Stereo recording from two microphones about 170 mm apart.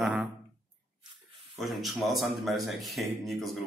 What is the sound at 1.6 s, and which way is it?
A man's voice, centre (ahead or behind).